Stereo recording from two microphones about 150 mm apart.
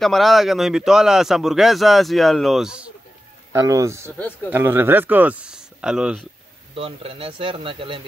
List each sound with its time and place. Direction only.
0.0 s speech: centre (ahead or behind)
3.5 s a man's voice: 20° right (ahead or behind); by 6.2 s 5° right (ahead or behind)
6.7 s speech: 40° right (ahead or behind)